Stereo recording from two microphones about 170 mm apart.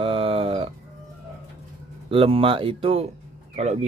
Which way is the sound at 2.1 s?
30° right (ahead or behind).